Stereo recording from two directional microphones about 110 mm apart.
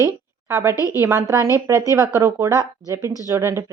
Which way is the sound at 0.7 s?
30° left (ahead or behind).